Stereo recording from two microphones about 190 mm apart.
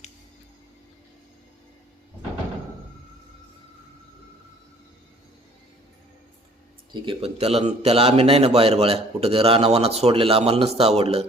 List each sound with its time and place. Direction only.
6.9 s a man's voice: 25° right (ahead or behind)